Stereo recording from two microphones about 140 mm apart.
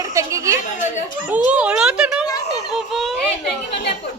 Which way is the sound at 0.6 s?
65° left (ahead or behind).